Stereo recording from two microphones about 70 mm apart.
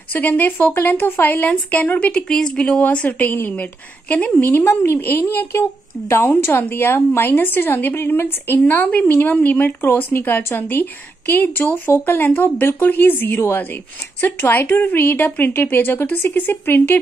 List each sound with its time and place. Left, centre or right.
0.1 s a woman's voice: left